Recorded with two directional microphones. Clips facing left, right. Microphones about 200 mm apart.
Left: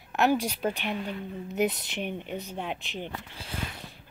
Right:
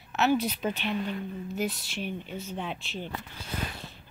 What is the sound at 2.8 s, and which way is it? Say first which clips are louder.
Speech: left 1 dB; 15° left (ahead or behind).